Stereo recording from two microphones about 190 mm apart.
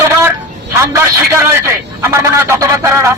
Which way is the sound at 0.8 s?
15° right (ahead or behind).